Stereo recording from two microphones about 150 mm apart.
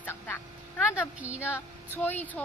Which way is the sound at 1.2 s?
10° right (ahead or behind).